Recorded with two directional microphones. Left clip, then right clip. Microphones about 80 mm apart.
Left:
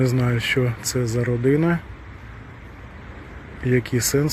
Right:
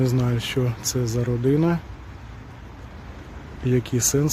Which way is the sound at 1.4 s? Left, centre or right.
Right.